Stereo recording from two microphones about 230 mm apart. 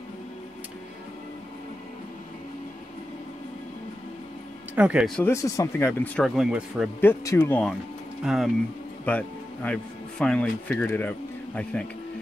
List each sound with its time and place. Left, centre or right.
4.7 s speech: centre
7.0 s speech: centre